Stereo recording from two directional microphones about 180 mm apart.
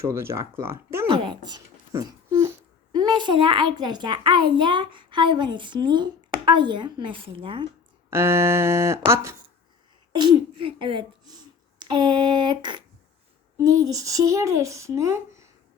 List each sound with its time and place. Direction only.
0.0 s a child's voice: 15° right (ahead or behind)
1.0 s a sound: 30° right (ahead or behind)
3.8 s a child's voice: 25° right (ahead or behind)
8.1 s a child's voice: 15° right (ahead or behind)